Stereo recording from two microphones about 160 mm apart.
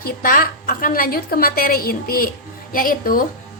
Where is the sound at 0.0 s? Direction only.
65° left (ahead or behind).